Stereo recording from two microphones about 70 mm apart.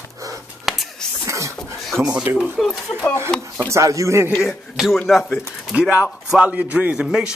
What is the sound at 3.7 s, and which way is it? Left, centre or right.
Speech, right.